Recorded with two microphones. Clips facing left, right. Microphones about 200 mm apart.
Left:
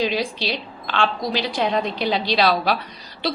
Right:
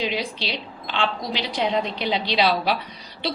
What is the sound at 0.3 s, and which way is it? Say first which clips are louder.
A woman's voice: left 3 dB; 20° right (ahead or behind).